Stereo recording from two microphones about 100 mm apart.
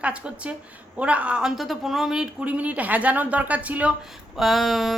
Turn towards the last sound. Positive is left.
turn(degrees=0)  # may be behind; listen again after turning